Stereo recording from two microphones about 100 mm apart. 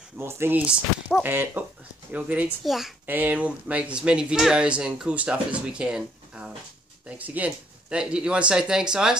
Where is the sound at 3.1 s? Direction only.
15° right (ahead or behind).